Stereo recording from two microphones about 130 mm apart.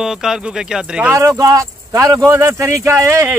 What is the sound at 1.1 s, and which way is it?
A man's voice, 25° right (ahead or behind).